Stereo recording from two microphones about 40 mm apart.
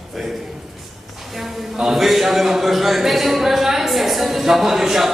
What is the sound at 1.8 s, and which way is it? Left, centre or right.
A man's voice, centre.